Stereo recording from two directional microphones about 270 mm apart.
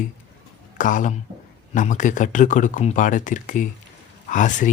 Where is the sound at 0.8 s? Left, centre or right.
Left.